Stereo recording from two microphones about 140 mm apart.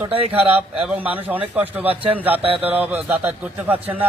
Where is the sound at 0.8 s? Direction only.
10° right (ahead or behind).